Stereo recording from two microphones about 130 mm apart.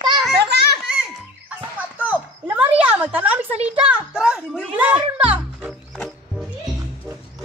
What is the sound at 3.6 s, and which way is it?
A child's voice, 10° right (ahead or behind).